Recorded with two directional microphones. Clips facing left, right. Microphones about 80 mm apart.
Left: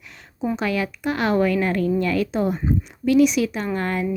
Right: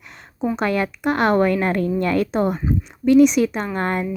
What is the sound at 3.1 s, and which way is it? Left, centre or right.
Speech, right.